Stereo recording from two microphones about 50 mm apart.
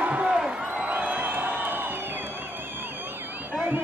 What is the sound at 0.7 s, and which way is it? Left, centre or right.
Music, right.